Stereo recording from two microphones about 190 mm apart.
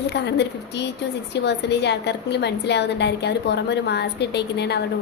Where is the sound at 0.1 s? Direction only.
65° left (ahead or behind).